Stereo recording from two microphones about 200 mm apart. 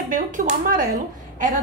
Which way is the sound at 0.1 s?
40° right (ahead or behind).